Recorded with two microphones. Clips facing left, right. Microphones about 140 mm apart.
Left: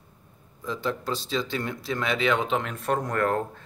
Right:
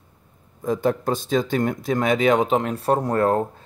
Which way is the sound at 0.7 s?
50° right (ahead or behind).